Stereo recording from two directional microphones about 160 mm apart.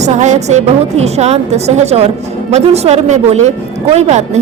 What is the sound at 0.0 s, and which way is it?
A woman's voice, 45° right (ahead or behind).